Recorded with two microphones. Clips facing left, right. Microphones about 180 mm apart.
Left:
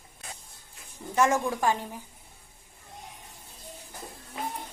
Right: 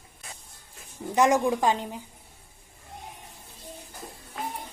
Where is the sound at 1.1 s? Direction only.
15° right (ahead or behind).